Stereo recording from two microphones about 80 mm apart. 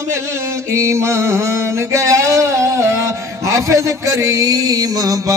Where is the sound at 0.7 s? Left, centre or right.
Right.